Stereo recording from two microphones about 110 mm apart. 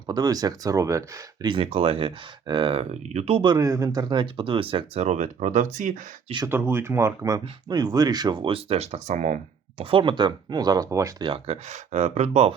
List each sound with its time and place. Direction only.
0.1 s speech: 35° right (ahead or behind)
1.5 s speech: 50° right (ahead or behind)
1.7 s speech: 65° right (ahead or behind); by 2.8 s 50° right (ahead or behind)
2.9 s speech: 90° right
3.4 s speech: 35° right (ahead or behind); by 5.0 s 55° right (ahead or behind)
5.0 s speech: 90° right
6.5 s speech: 20° right (ahead or behind); by 9.2 s 85° right
9.7 s speech: 55° right (ahead or behind); by 11.1 s 30° right (ahead or behind)
11.4 s speech: 80° right